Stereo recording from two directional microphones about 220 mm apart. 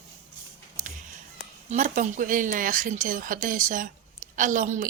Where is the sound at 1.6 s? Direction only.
35° right (ahead or behind).